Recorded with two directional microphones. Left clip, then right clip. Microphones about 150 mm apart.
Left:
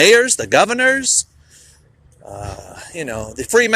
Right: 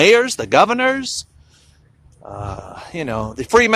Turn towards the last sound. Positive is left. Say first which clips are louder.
# right 1 dB
turn(degrees=-25)  # may be behind; listen again after turning